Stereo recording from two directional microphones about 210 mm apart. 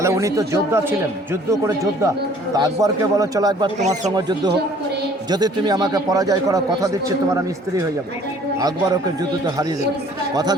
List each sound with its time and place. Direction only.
0.0 s speech: 15° right (ahead or behind)
3.8 s speech: 35° right (ahead or behind)
4.1 s a man's voice: 20° right (ahead or behind)